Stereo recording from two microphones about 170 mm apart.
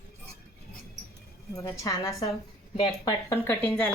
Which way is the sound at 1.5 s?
20° left (ahead or behind).